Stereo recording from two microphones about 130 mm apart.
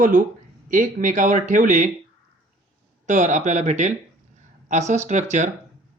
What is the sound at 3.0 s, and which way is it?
Speech, 70° right (ahead or behind).